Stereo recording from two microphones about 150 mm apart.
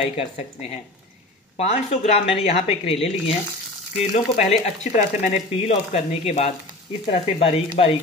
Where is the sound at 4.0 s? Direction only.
40° left (ahead or behind).